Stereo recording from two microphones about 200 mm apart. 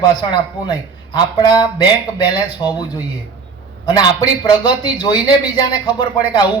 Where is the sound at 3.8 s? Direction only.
20° left (ahead or behind).